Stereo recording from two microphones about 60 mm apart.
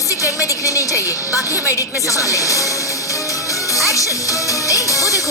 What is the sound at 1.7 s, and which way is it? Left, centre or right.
Music, left.